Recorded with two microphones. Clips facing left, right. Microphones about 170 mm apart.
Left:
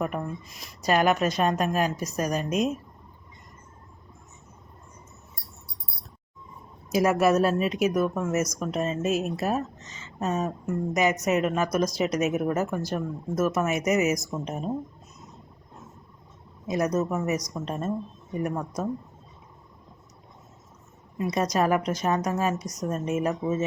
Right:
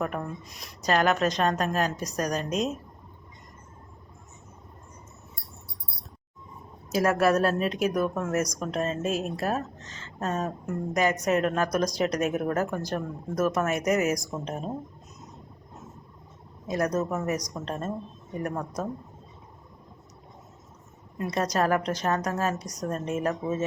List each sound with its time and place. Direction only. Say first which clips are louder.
0.0 s a woman's voice: left 1 dB; 5° left (ahead or behind)
6.9 s a woman's voice: left 1 dB; 10° left (ahead or behind)
16.6 s a woman's voice: left 1 dB; 10° left (ahead or behind)
21.2 s a woman's voice: left 2 dB; 10° left (ahead or behind)